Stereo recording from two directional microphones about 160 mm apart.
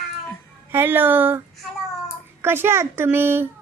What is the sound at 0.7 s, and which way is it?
Speech, 15° right (ahead or behind).